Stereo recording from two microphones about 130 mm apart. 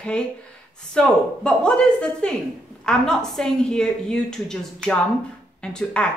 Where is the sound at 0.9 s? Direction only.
5° left (ahead or behind).